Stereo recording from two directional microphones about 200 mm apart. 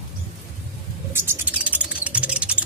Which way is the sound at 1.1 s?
5° right (ahead or behind).